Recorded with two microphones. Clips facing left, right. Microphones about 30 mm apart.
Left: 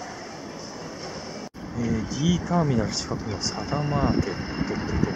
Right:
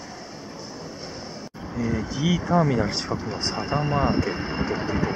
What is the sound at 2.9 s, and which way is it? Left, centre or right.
Speech, right.